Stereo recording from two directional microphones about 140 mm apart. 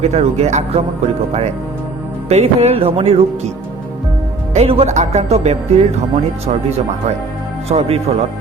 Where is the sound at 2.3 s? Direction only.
50° right (ahead or behind).